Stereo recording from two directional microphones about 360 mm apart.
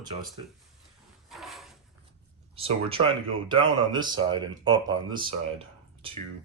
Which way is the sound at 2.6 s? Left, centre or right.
Centre.